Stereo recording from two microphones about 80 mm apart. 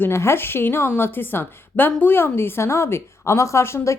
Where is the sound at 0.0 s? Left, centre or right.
Left.